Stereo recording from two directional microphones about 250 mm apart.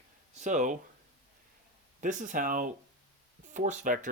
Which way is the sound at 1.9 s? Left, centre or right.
Right.